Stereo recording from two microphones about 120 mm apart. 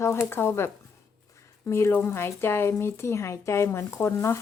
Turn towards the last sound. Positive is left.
turn(degrees=25)  # may be behind; listen again after turning